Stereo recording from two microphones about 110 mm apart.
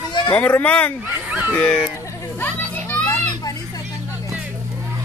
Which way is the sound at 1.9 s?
30° left (ahead or behind).